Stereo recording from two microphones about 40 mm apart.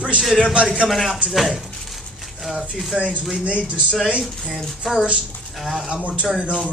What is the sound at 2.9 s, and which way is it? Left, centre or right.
Speech, centre.